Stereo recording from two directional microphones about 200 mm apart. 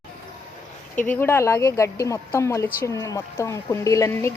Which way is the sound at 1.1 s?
10° left (ahead or behind).